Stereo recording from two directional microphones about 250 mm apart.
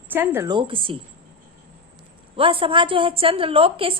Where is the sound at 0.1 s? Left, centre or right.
Centre.